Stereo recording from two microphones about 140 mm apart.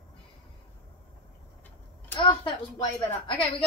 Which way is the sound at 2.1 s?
35° left (ahead or behind).